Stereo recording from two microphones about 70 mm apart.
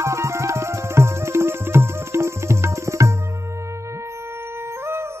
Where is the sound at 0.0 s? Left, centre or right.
Right.